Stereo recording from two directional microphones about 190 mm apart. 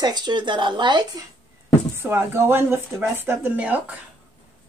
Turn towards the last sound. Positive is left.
turn(degrees=-5)  # may be behind; listen again after turning